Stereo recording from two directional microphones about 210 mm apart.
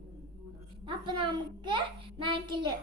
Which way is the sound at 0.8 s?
20° right (ahead or behind).